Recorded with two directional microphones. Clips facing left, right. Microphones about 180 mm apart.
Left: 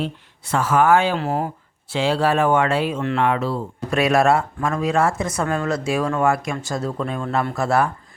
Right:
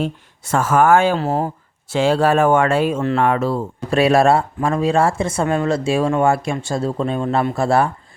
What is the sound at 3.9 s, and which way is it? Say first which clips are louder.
Speech: right 3 dB; 30° right (ahead or behind).